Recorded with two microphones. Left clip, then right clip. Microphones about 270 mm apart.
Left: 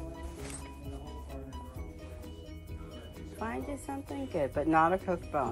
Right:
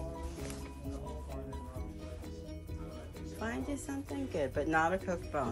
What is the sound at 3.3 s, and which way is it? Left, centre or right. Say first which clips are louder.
Music: left 1 dB; centre.